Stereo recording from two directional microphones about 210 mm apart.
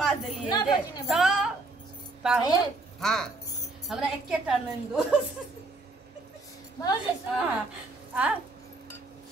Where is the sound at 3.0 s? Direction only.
Centre (ahead or behind).